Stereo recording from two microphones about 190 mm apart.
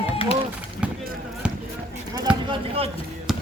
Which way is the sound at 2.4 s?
30° right (ahead or behind).